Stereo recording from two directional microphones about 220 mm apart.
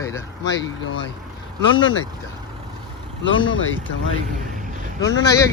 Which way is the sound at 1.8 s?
60° left (ahead or behind).